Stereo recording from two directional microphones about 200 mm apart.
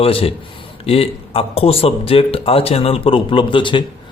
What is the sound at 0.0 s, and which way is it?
Speech, 30° left (ahead or behind).